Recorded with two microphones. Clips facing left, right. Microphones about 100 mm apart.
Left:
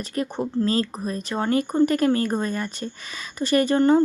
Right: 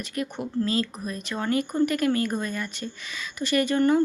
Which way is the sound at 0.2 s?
35° left (ahead or behind).